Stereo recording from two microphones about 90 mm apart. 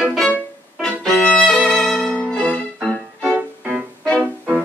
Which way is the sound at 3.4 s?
15° right (ahead or behind).